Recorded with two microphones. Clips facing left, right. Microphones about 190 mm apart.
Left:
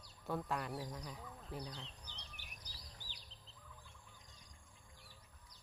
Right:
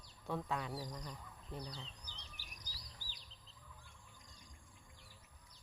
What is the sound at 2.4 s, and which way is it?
Insect, 35° right (ahead or behind).